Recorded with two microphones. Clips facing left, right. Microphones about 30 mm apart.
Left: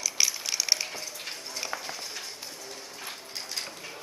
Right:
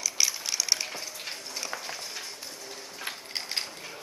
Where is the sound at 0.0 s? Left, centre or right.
Centre.